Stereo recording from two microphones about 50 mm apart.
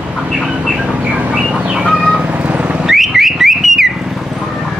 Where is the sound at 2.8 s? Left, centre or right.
Centre.